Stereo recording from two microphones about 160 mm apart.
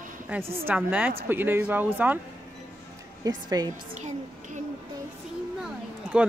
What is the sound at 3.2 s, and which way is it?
Speech, 25° right (ahead or behind).